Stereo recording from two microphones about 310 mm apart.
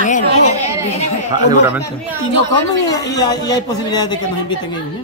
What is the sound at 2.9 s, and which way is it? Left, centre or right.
A man's voice, centre.